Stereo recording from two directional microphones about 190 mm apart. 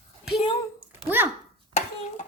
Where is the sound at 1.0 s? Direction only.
10° right (ahead or behind).